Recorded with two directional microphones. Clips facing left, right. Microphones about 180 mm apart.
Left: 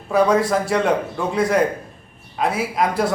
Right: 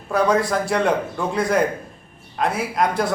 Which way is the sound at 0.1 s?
Centre (ahead or behind).